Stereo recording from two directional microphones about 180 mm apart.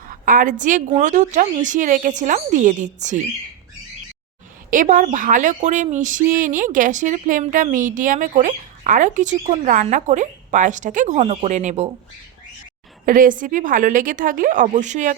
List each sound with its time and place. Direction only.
0.1 s a woman's voice: 50° right (ahead or behind)
4.7 s a woman's voice: 45° right (ahead or behind)
13.1 s a woman's voice: 50° right (ahead or behind)